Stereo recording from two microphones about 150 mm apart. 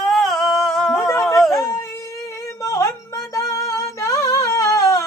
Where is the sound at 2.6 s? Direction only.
20° left (ahead or behind).